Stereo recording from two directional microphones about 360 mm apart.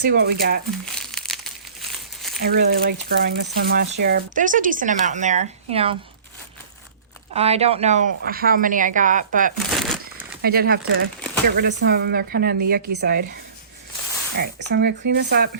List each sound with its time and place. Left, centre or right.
0.0 s speech: right
0.9 s crumpling: centre
2.4 s speech: right
7.3 s speech: centre
9.7 s crumpling: centre
10.4 s speech: right